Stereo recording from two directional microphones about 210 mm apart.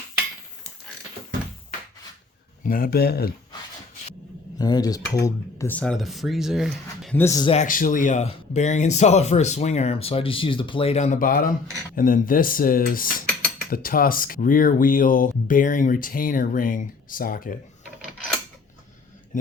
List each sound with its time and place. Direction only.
2.6 s speech: 45° left (ahead or behind)
4.5 s speech: 20° left (ahead or behind); by 7.2 s centre (ahead or behind)
7.2 s speech: 15° left (ahead or behind)
7.5 s speech: 35° left (ahead or behind)